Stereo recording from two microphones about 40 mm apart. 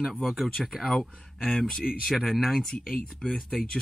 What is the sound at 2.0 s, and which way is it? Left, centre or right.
Speech, centre.